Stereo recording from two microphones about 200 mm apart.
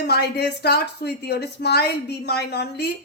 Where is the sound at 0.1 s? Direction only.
55° left (ahead or behind).